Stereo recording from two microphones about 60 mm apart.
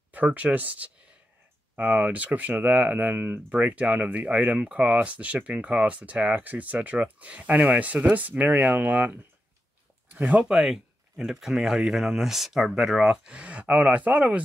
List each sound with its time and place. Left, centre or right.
0.1 s speech: right
10.1 s speech: right
10.4 s speech: centre; by 14.4 s right